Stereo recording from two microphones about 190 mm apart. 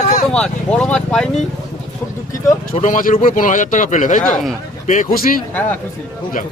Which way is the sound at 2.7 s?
40° left (ahead or behind).